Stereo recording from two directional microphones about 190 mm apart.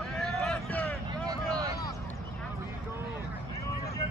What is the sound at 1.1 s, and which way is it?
Vehicle, 20° right (ahead or behind).